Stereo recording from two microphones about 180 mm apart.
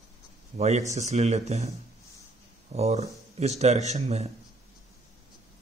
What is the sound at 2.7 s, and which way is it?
A man's voice, 35° right (ahead or behind).